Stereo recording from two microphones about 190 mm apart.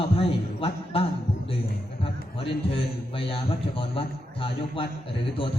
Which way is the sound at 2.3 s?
30° left (ahead or behind).